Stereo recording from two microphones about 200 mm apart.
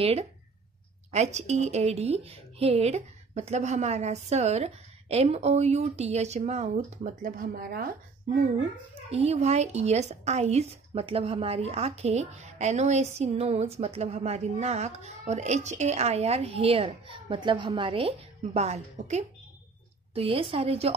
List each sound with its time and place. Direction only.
0.0 s a woman's voice: 30° right (ahead or behind); by 7.9 s 45° right (ahead or behind)
9.1 s a woman's voice: 30° right (ahead or behind)